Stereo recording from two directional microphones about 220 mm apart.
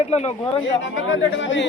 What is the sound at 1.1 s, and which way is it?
Speech, 60° left (ahead or behind).